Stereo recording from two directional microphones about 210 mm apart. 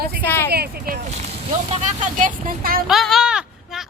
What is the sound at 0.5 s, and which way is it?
Speech, 45° right (ahead or behind).